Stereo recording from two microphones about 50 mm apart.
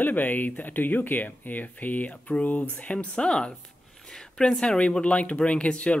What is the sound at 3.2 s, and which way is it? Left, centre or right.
Speech, centre.